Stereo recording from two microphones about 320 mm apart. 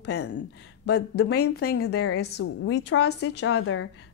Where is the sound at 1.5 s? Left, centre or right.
Left.